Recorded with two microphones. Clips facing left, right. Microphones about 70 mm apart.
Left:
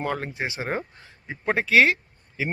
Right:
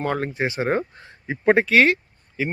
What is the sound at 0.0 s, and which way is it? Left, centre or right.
Speech, centre.